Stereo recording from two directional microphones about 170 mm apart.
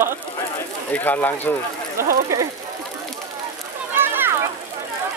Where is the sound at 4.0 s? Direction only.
15° right (ahead or behind).